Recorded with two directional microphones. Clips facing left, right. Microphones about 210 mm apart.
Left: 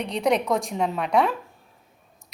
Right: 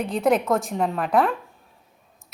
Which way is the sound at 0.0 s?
Centre (ahead or behind).